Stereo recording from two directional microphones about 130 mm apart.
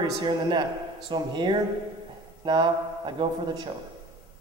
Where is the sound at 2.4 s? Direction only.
35° right (ahead or behind).